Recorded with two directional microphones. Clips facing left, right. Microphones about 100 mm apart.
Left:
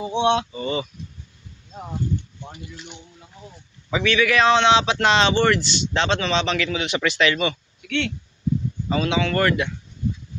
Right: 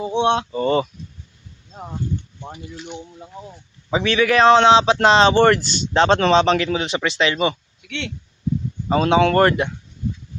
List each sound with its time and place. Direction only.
0.2 s speech: 45° right (ahead or behind)
2.5 s speech: 30° right (ahead or behind)
8.9 s speech: 40° right (ahead or behind)